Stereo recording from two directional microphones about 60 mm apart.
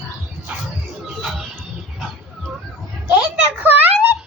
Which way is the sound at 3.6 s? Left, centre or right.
Right.